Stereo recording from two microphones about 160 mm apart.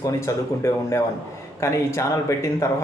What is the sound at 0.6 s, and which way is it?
A man's voice, 20° left (ahead or behind).